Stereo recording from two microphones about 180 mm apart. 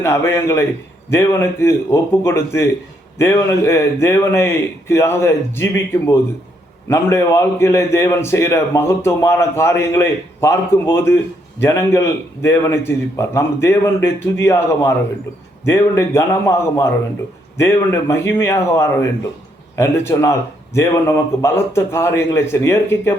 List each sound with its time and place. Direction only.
0.0 s a man's voice: 15° left (ahead or behind)